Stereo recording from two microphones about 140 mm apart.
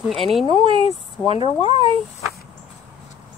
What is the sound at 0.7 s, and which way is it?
Speech, 45° left (ahead or behind).